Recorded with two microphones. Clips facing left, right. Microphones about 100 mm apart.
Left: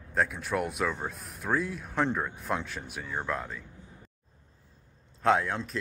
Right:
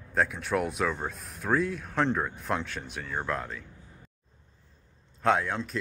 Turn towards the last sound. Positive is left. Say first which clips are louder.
# even
turn(degrees=0)  # may be behind; listen again after turning